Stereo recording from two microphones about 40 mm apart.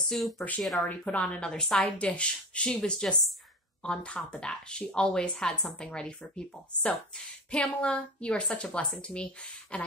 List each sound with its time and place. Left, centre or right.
0.1 s speech: centre
0.8 s speech: left
1.2 s a woman's voice: left
1.5 s a woman's voice: centre
1.8 s a woman's voice: left